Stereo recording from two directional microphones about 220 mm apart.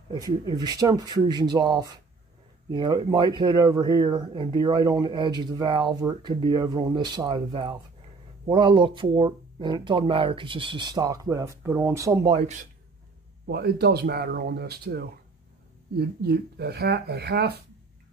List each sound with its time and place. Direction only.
0.1 s speech: 20° right (ahead or behind)
12.3 s speech: 30° right (ahead or behind)
13.5 s speech: 45° right (ahead or behind)